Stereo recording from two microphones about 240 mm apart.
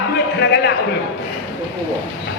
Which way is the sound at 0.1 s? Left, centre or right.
Left.